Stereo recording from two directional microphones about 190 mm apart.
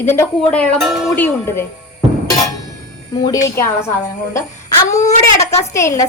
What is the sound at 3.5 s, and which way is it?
Speech, 15° left (ahead or behind).